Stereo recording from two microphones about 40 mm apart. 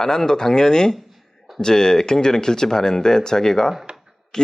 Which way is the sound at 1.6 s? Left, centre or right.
Centre.